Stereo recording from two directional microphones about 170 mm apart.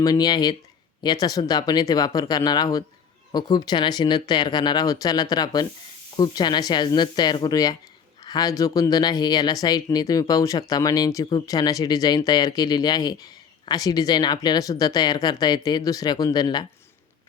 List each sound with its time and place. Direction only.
0.0 s speech: 25° left (ahead or behind)